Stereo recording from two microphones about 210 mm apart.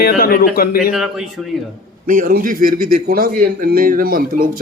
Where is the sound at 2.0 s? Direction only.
40° right (ahead or behind).